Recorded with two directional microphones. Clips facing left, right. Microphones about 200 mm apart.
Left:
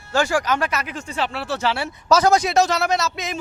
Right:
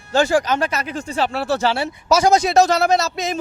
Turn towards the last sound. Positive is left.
turn(degrees=-35)  # may be behind; listen again after turning